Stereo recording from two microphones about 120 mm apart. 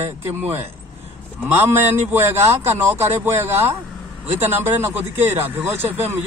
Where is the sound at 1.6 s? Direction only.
15° right (ahead or behind).